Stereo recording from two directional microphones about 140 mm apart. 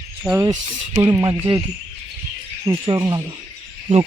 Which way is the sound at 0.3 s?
Centre (ahead or behind).